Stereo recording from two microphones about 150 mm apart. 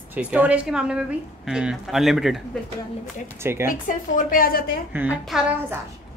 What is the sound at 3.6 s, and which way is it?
A woman's voice, 65° left (ahead or behind).